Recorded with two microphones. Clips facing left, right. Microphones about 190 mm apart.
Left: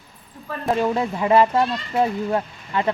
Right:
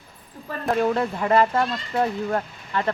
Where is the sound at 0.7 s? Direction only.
10° left (ahead or behind).